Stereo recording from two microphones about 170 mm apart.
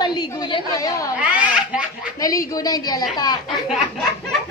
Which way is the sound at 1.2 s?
10° right (ahead or behind).